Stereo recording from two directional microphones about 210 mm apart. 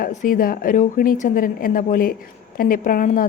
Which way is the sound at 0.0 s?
40° left (ahead or behind).